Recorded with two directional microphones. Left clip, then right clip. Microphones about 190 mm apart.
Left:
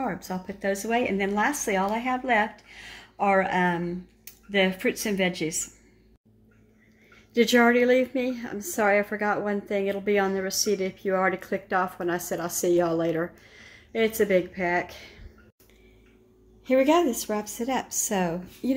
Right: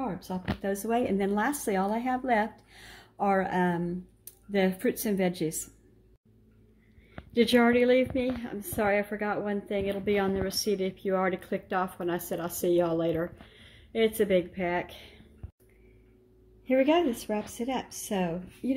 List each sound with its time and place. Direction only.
0.6 s speech: 15° right (ahead or behind)
7.3 s a woman's voice: centre (ahead or behind)
16.6 s a woman's voice: centre (ahead or behind)